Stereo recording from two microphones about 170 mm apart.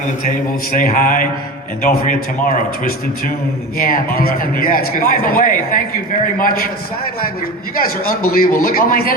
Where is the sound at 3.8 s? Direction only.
60° left (ahead or behind).